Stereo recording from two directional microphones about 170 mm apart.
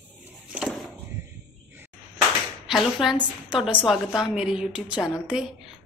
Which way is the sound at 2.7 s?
Centre (ahead or behind).